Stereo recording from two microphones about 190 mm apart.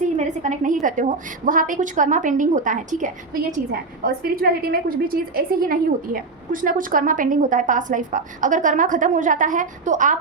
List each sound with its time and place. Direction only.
0.2 s a woman's voice: 40° right (ahead or behind)